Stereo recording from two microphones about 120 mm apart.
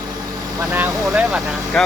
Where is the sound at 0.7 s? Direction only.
15° right (ahead or behind).